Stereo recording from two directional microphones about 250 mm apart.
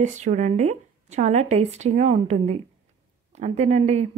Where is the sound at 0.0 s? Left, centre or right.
Right.